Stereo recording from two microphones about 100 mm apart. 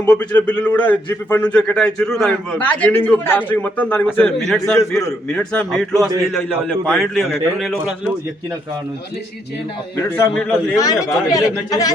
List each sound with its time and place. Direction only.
0.0 s a man's voice: 15° left (ahead or behind)
4.4 s a man's voice: 5° left (ahead or behind)
4.7 s a man's voice: 30° left (ahead or behind)
5.3 s a man's voice: 10° left (ahead or behind)
10.3 s a man's voice: 10° left (ahead or behind)
10.8 s a man's voice: 40° left (ahead or behind)